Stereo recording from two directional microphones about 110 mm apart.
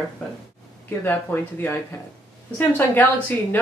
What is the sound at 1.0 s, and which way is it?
Speech, 20° left (ahead or behind).